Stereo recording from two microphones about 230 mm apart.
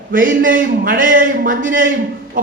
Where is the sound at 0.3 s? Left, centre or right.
Right.